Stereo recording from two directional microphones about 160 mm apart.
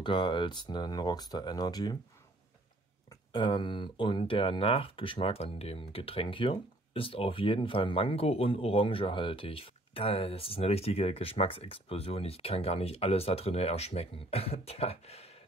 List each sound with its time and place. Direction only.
0.0 s speech: 30° left (ahead or behind)
3.3 s speech: 30° left (ahead or behind)